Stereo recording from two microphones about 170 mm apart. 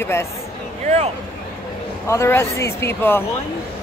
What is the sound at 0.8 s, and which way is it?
Speech, 40° right (ahead or behind).